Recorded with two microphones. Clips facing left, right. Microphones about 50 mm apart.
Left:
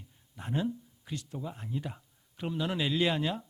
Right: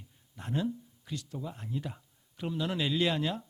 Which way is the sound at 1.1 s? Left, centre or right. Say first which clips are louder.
Even; left.